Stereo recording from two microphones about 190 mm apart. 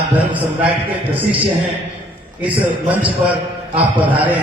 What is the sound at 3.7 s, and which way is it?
Speech, 25° right (ahead or behind).